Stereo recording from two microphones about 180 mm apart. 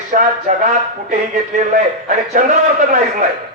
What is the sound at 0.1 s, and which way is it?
Speech, 45° right (ahead or behind).